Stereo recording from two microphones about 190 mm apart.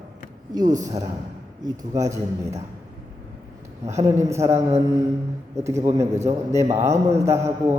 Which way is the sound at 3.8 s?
15° right (ahead or behind).